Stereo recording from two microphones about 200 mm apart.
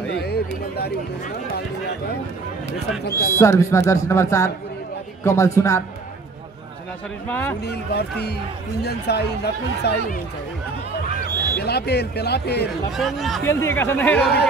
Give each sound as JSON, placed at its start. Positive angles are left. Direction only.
{"t": 0.2, "sound": "speech", "side_deg": 50}
{"t": 3.2, "sound": "speech", "side_deg": 15}
{"t": 7.2, "sound": "speech", "side_deg": 10}
{"t": 7.6, "sound": "speech", "side_deg": 55}
{"t": 11.2, "sound": "speech", "side_deg": 50}
{"t": 12.9, "sound": "speech", "side_deg": 0}
{"t": 13.5, "sound": "speech", "side_deg": 10}